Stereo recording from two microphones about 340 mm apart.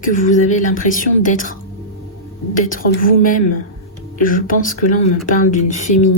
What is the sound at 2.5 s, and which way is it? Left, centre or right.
Speech, left.